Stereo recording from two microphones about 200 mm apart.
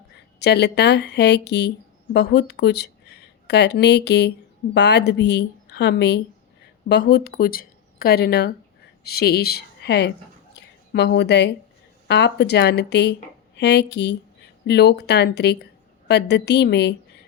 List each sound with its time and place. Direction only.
0.3 s a woman's voice: 55° left (ahead or behind)